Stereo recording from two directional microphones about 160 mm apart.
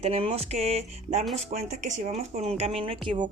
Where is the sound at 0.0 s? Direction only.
40° right (ahead or behind).